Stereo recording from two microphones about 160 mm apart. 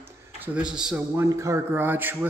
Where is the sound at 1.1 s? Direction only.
20° right (ahead or behind).